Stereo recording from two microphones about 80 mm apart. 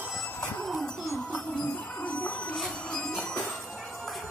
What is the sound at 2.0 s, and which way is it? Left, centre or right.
Music, centre.